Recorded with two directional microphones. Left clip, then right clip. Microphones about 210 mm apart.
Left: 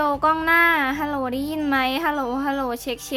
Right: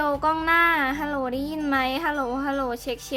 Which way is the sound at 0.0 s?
10° left (ahead or behind).